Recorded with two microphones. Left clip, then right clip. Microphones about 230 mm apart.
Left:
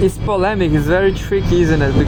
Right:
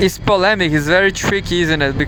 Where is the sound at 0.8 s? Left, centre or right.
Right.